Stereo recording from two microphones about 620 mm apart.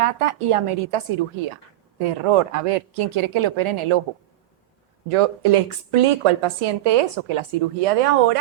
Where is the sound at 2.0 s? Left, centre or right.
Right.